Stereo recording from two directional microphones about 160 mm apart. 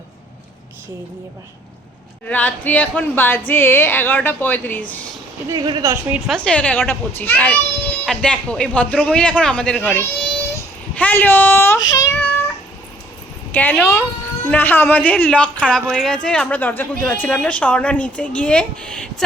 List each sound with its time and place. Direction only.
2.2 s a woman's voice: 10° left (ahead or behind)
5.5 s speech: 25° right (ahead or behind)
5.9 s a woman's voice: 5° right (ahead or behind); by 12.2 s 20° left (ahead or behind)
13.5 s a woman's voice: 10° left (ahead or behind)